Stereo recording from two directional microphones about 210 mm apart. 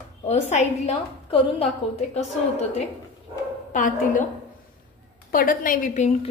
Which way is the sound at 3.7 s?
40° left (ahead or behind).